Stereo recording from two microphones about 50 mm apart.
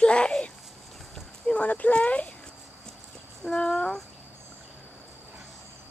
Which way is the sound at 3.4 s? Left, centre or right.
Centre.